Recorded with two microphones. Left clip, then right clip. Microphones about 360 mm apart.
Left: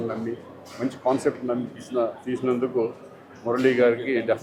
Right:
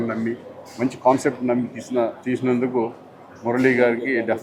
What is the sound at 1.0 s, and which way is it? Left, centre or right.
Speech, right.